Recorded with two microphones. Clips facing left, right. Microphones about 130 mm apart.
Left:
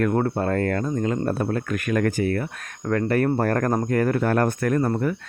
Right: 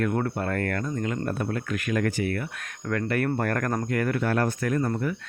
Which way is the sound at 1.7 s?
50° left (ahead or behind).